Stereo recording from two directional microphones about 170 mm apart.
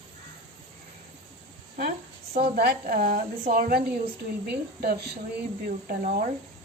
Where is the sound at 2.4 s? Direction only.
65° right (ahead or behind).